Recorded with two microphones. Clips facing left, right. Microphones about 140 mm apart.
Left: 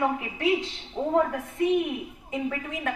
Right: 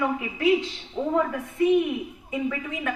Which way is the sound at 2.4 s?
45° left (ahead or behind).